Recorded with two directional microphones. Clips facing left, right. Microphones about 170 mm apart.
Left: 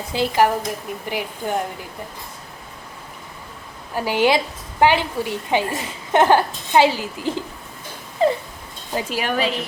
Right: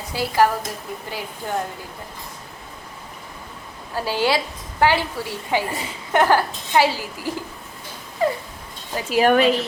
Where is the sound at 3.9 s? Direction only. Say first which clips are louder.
Left 3 dB; 15° left (ahead or behind).